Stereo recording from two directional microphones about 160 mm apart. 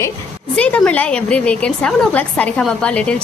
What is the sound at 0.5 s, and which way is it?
A woman's voice, 5° left (ahead or behind).